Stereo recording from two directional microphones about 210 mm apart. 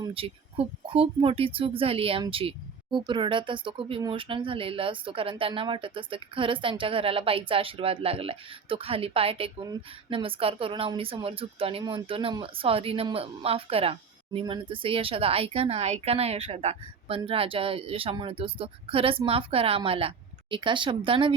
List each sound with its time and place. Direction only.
0.0 s speech: 25° right (ahead or behind)